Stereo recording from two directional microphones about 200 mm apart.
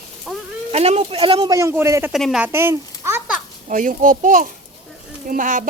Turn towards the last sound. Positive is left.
turn(degrees=-40)  # may be behind; listen again after turning